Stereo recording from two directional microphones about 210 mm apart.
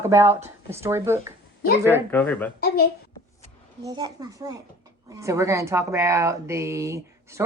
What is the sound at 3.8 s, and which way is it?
Speech, 20° right (ahead or behind).